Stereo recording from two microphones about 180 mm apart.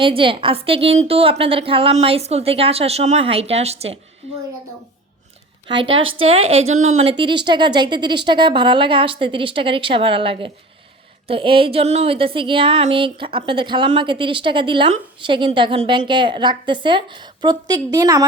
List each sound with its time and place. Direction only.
0.0 s a woman's voice: 30° right (ahead or behind)
5.6 s a woman's voice: 25° right (ahead or behind)